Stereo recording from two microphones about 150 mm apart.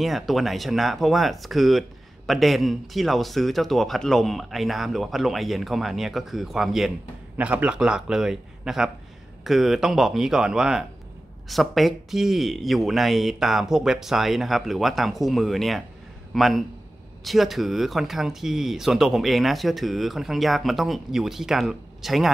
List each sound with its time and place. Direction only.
0.0 s speech: centre (ahead or behind)